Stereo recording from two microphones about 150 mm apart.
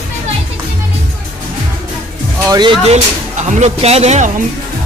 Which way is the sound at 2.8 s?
50° right (ahead or behind).